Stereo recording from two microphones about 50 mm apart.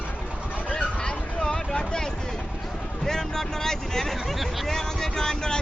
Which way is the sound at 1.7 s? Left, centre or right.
Centre.